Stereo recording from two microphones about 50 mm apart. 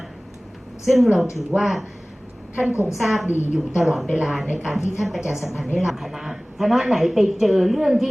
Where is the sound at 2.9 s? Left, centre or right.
Centre.